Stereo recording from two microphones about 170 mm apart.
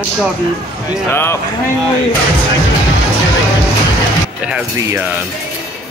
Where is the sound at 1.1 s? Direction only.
15° left (ahead or behind).